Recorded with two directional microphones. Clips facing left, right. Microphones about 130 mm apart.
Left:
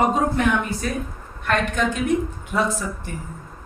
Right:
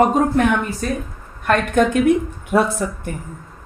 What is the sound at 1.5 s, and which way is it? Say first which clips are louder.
A woman's voice: right 6 dB; 55° right (ahead or behind).